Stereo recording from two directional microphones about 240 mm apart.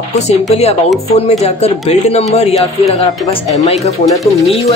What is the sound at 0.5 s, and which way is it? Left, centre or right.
Speech, left.